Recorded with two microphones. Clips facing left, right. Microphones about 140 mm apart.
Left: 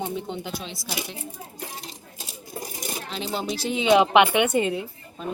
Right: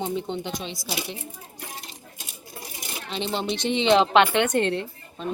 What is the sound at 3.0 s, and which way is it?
A woman's voice, 5° left (ahead or behind).